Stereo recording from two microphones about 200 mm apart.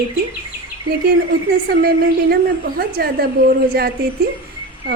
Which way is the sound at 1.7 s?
50° right (ahead or behind).